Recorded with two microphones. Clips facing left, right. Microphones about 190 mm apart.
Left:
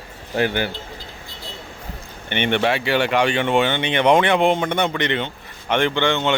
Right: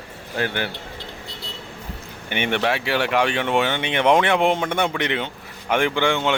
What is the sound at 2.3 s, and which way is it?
Speech, 5° right (ahead or behind).